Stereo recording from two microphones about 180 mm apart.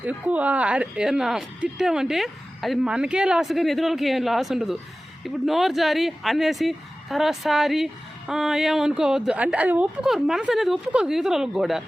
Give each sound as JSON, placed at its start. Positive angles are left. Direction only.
{"t": 0.0, "sound": "speech", "side_deg": -10}